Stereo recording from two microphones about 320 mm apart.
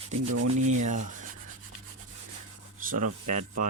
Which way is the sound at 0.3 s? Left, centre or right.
Right.